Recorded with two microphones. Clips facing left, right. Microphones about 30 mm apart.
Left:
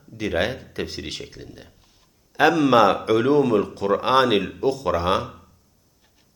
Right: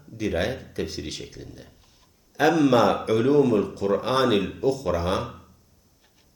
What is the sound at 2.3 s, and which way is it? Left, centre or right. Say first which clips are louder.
Speech: left 3 dB; left.